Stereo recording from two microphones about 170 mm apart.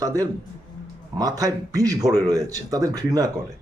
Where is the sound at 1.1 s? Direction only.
20° right (ahead or behind).